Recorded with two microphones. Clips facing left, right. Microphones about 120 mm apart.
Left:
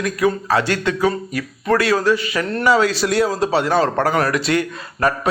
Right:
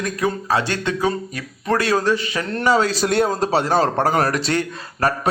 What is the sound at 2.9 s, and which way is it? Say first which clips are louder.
Speech: left 1 dB; 50° right (ahead or behind).